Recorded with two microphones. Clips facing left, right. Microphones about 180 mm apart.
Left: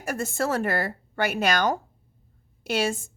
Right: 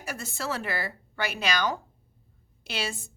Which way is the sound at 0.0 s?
50° left (ahead or behind).